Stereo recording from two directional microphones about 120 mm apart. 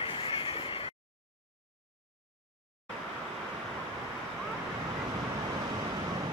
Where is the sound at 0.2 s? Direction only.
50° left (ahead or behind).